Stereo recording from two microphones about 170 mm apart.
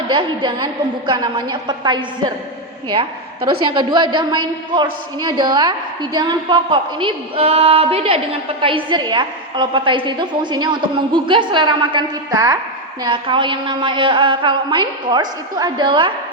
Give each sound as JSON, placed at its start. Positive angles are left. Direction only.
{"t": 0.1, "sound": "a man's voice", "side_deg": -30}